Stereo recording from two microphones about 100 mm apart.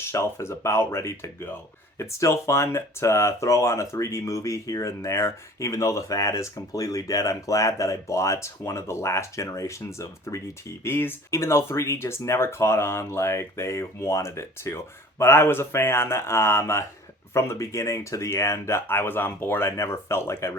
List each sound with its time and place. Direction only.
0.0 s speech: 30° left (ahead or behind)